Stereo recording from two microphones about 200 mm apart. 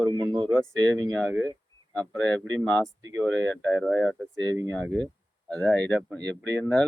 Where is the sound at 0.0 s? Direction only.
20° right (ahead or behind).